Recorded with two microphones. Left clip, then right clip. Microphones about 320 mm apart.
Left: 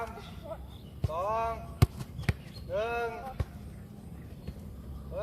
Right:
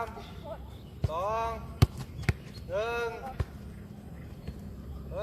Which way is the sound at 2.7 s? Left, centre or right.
Right.